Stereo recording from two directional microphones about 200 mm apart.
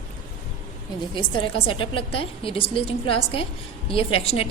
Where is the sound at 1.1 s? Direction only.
25° left (ahead or behind).